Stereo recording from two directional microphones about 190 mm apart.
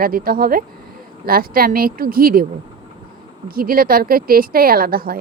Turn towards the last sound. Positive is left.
turn(degrees=-50)  # may be behind; listen again after turning